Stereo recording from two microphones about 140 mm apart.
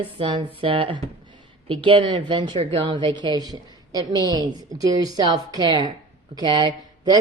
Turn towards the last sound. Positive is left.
turn(degrees=-30)  # may be behind; listen again after turning